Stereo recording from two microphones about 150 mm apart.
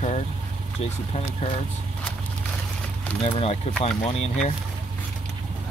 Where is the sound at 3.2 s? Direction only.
40° left (ahead or behind).